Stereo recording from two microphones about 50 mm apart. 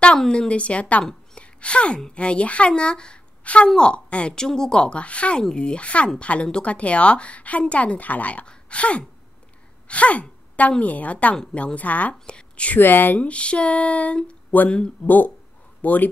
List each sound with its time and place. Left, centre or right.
0.3 s speech: left
1.3 s a sound: left
2.1 s a woman's voice: left
4.4 s speech: centre
9.8 s sneeze: left
10.8 s speech: left
12.3 s speech: left
12.7 s speech: left
13.2 s speech: left
14.5 s speech: left